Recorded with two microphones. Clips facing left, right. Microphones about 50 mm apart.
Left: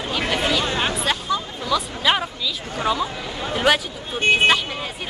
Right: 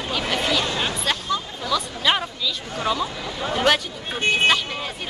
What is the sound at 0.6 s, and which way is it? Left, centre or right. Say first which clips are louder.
Speech: left 2 dB; left.